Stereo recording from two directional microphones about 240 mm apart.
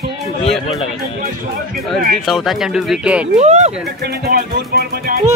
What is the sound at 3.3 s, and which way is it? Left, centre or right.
Speech, right.